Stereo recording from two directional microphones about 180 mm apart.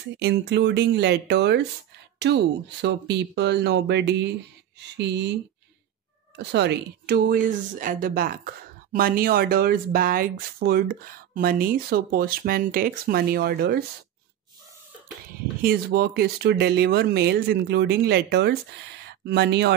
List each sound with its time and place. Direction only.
0.2 s speech: 70° right (ahead or behind)
6.3 s a woman's voice: 70° right (ahead or behind)
15.6 s a woman's voice: 55° right (ahead or behind)